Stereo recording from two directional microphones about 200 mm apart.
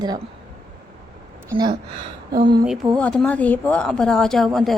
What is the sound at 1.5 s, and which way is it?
Speech, 20° right (ahead or behind).